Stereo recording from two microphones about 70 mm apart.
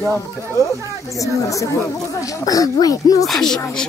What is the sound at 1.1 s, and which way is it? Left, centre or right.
Speech, left.